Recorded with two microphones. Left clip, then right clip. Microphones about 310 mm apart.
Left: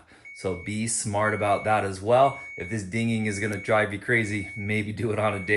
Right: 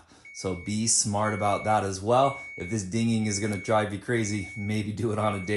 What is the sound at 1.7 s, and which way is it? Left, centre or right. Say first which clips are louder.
Speech: left 1 dB; centre.